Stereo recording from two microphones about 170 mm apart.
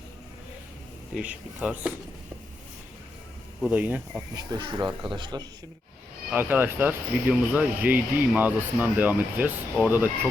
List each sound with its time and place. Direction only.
1.1 s speech: 5° right (ahead or behind)
3.6 s speech: 10° right (ahead or behind)
4.4 s speech: 25° right (ahead or behind)
6.3 s speech: 10° right (ahead or behind)